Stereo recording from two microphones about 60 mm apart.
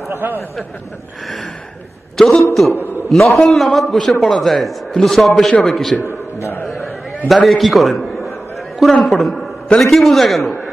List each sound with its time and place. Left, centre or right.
0.1 s speech: right
1.2 s a man's voice: centre
7.2 s a sound: centre
9.0 s a man's voice: centre